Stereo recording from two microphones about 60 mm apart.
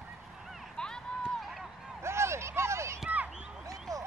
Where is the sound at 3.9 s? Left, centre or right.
Right.